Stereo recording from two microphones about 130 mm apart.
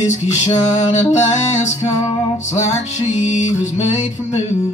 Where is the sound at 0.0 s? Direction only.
60° left (ahead or behind).